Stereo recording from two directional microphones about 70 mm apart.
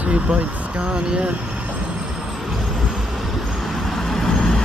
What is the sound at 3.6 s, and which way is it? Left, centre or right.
Vehicle, centre.